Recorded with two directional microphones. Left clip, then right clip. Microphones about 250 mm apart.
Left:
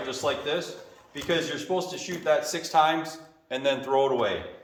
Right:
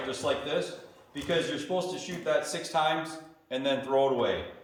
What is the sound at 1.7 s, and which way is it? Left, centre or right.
A man's voice, centre.